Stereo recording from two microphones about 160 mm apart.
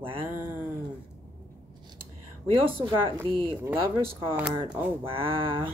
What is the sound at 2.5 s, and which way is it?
Speech, 30° right (ahead or behind).